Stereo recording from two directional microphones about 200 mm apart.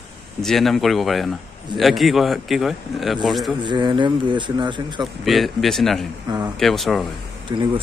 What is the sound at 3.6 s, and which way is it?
Speech, 25° right (ahead or behind).